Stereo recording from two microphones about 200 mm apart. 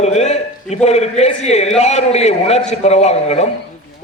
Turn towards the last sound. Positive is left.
turn(degrees=35)  # may be behind; listen again after turning